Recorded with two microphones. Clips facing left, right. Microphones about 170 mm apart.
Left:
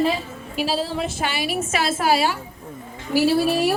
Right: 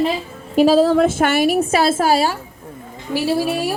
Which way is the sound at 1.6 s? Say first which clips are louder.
Right 7 dB; 35° right (ahead or behind).